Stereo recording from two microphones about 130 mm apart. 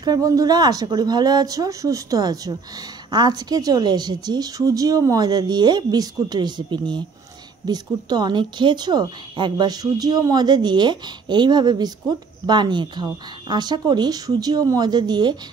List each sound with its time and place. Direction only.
0.0 s a woman's voice: 30° right (ahead or behind)